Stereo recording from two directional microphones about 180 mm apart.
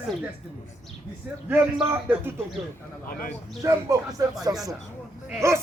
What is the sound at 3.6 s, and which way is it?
Speech, 20° right (ahead or behind).